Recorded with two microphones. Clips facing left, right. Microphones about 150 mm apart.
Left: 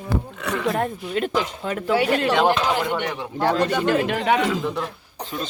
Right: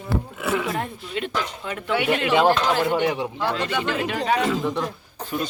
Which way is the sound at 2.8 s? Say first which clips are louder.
Right 4 dB; 10° right (ahead or behind).